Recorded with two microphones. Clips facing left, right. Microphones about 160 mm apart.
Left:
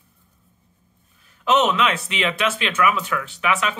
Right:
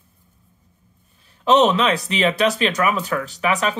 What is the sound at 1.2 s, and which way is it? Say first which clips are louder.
Speech: right 4 dB; 35° right (ahead or behind).